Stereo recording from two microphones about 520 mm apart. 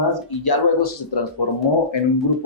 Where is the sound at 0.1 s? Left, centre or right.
Left.